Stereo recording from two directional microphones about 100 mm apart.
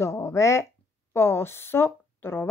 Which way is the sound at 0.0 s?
30° left (ahead or behind).